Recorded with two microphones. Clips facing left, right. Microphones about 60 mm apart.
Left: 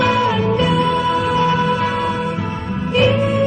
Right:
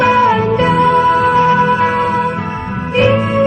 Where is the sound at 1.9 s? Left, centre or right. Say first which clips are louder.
Right 5 dB; right.